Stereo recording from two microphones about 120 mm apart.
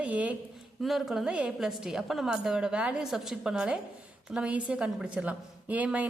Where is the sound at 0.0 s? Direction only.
10° right (ahead or behind).